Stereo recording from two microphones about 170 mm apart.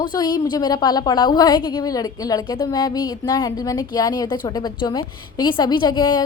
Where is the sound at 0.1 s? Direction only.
25° left (ahead or behind).